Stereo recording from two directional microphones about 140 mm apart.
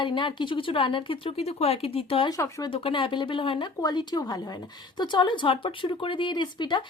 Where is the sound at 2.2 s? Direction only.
25° left (ahead or behind).